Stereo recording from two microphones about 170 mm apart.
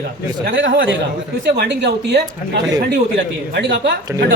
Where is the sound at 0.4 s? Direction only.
80° right.